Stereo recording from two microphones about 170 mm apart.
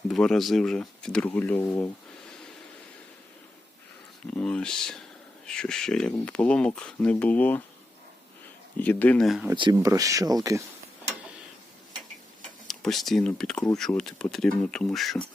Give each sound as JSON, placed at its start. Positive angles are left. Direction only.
{"t": 0.1, "sound": "speech", "side_deg": 0}
{"t": 4.4, "sound": "speech", "side_deg": 5}
{"t": 8.8, "sound": "speech", "side_deg": 10}
{"t": 9.8, "sound": "speech", "side_deg": -20}
{"t": 12.6, "sound": "speech", "side_deg": 0}